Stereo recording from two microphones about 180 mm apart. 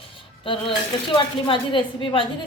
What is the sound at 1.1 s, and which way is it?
Speech, 30° left (ahead or behind).